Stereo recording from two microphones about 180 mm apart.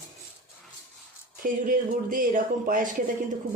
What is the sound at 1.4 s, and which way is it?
Speech, 50° right (ahead or behind).